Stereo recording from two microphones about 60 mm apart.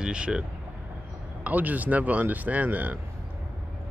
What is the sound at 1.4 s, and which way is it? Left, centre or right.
Speech, right.